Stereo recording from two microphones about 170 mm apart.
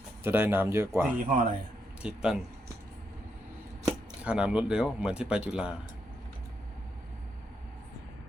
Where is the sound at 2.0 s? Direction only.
5° right (ahead or behind).